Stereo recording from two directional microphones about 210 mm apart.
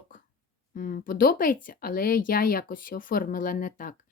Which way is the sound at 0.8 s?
40° left (ahead or behind).